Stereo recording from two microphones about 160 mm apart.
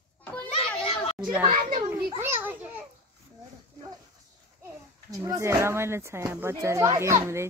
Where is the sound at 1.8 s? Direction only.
15° right (ahead or behind).